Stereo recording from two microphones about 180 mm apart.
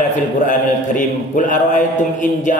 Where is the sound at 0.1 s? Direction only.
45° left (ahead or behind).